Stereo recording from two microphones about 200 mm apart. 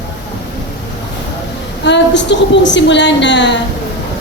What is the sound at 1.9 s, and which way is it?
A woman's voice, 60° left (ahead or behind).